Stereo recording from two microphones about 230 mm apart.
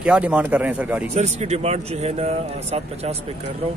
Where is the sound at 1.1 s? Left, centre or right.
Right.